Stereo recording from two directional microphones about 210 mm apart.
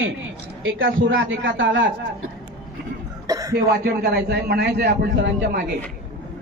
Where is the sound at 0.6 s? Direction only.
65° right (ahead or behind).